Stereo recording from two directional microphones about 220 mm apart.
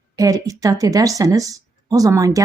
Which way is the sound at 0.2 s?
15° right (ahead or behind).